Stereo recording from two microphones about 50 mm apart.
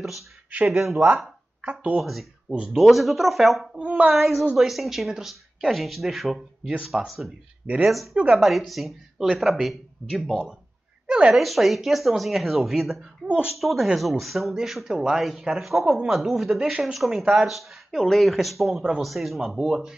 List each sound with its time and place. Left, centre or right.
0.7 s speech: centre
1.6 s speech: right
2.0 s speech: centre
3.7 s a woman's voice: right
4.1 s speech: centre
11.1 s a sound: centre
11.3 s speech: centre
17.2 s speech: centre
17.5 s speech: centre
19.7 s speech: centre